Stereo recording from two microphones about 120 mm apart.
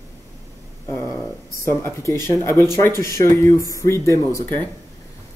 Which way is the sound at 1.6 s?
20° left (ahead or behind).